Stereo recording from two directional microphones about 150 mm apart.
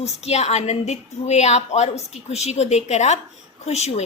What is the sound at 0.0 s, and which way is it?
A woman's voice, 45° left (ahead or behind).